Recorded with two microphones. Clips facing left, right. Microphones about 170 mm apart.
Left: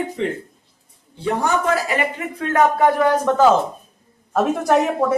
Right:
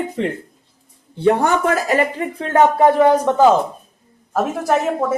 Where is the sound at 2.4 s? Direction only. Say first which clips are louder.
Right 2 dB; 30° right (ahead or behind).